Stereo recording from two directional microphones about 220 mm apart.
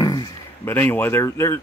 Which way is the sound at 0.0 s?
20° left (ahead or behind).